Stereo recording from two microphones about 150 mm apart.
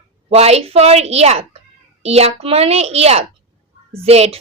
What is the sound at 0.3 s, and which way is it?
A woman's voice, 45° right (ahead or behind).